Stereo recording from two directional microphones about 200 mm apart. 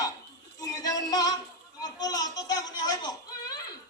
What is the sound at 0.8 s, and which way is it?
Music, 20° left (ahead or behind).